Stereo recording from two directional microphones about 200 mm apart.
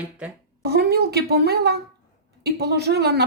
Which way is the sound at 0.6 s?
55° right (ahead or behind).